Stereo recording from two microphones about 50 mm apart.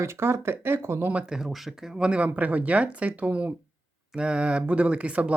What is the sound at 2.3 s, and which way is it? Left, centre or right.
A woman's voice, right.